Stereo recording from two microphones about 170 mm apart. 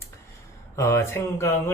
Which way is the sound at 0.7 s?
15° left (ahead or behind).